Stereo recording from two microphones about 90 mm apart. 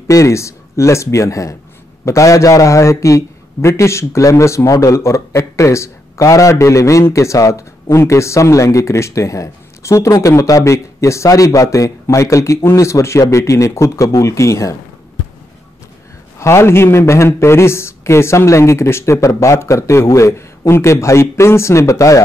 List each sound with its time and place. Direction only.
0.1 s a man's voice: 35° left (ahead or behind)
16.3 s a man's voice: 30° left (ahead or behind)